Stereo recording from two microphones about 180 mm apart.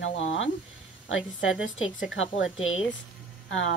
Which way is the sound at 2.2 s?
90° left.